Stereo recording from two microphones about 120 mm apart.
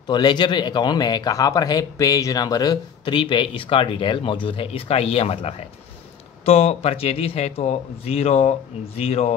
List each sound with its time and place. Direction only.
0.0 s speech: 40° left (ahead or behind); by 9.3 s 60° left (ahead or behind)